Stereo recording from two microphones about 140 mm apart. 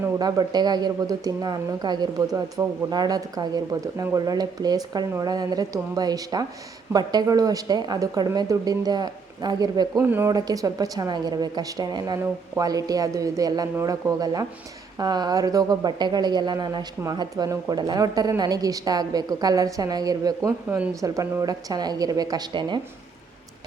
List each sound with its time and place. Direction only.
0.2 s speech: 30° right (ahead or behind)
10.0 s speech: 15° right (ahead or behind)
10.3 s speech: 25° right (ahead or behind)
20.7 s speech: 10° right (ahead or behind)
21.0 s speech: 25° right (ahead or behind)